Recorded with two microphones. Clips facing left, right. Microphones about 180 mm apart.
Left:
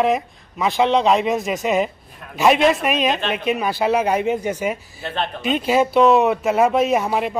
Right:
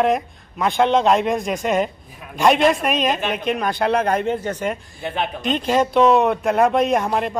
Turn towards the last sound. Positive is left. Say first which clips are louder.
# even
turn(degrees=5)  # may be behind; listen again after turning